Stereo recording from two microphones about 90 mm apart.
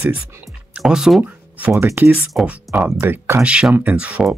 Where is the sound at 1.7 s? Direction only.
30° right (ahead or behind).